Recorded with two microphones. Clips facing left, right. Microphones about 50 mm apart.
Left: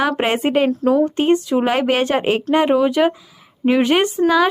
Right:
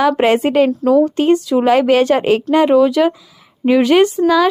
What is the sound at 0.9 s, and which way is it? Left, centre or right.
A woman's voice, left.